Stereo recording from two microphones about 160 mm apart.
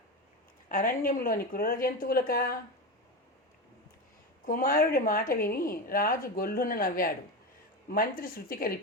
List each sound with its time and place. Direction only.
0.7 s a woman's voice: 60° left (ahead or behind)
4.4 s a woman's voice: 60° left (ahead or behind)